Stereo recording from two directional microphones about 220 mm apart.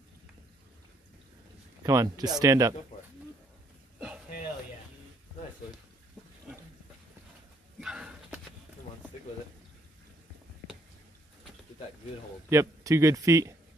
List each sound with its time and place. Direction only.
1.8 s speech: 15° right (ahead or behind)
7.8 s a sound: 5° right (ahead or behind)
12.4 s speech: 15° right (ahead or behind)